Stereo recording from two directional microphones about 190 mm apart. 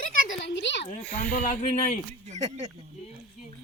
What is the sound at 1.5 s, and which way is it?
Speech, 40° left (ahead or behind).